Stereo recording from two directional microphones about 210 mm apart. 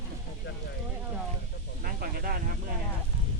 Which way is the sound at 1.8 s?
45° right (ahead or behind).